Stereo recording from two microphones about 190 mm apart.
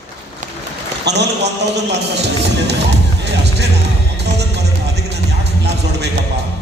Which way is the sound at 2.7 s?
60° right (ahead or behind).